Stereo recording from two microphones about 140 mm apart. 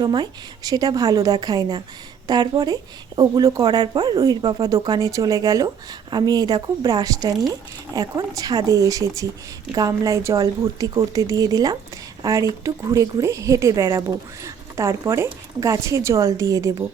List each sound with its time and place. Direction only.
0.0 s speech: 30° right (ahead or behind)